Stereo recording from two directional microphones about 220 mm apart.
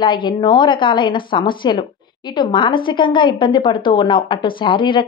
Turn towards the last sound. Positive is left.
turn(degrees=20)  # may be behind; listen again after turning